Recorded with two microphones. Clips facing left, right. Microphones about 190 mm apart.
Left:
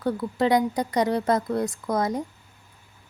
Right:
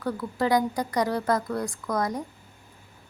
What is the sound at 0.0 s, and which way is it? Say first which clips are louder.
Speech: left 3 dB; 25° left (ahead or behind).